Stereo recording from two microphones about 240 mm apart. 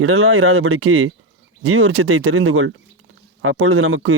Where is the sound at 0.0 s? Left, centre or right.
Right.